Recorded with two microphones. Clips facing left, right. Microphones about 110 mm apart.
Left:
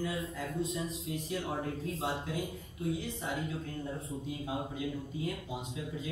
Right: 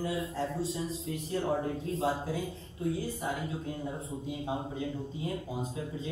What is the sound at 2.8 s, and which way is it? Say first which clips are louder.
Speech: right 3 dB; 20° left (ahead or behind).